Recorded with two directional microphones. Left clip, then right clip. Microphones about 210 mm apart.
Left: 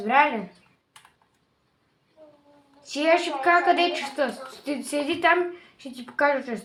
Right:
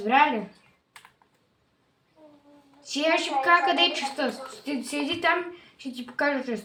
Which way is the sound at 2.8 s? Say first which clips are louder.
Left 3 dB; 25° left (ahead or behind).